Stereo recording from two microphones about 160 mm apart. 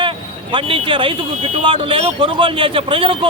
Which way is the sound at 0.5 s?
30° right (ahead or behind).